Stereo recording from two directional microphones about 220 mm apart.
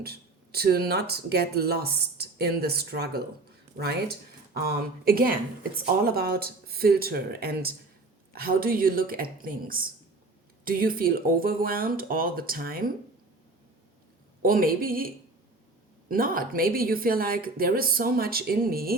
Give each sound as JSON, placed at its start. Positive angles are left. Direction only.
{"t": 0.0, "sound": "speech", "side_deg": -45}
{"t": 4.5, "sound": "speech", "side_deg": -45}
{"t": 14.4, "sound": "speech", "side_deg": -40}